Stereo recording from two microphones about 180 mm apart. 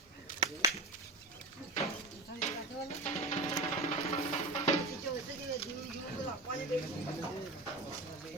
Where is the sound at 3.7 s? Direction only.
35° left (ahead or behind).